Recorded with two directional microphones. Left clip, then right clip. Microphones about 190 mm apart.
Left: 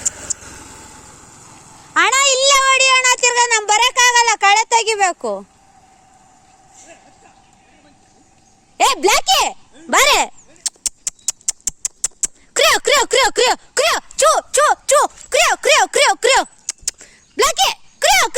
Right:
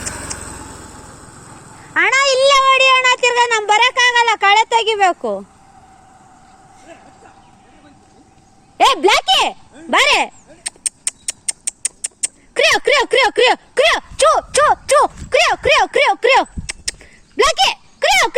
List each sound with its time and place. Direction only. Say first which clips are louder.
0.3 s a sound: right 4 dB; 15° right (ahead or behind); by 1.8 s 10° left (ahead or behind)
1.9 s child singing: even; 25° left (ahead or behind)
8.8 s speech: right 2 dB; 30° left (ahead or behind)
12.5 s speech: even; 40° left (ahead or behind)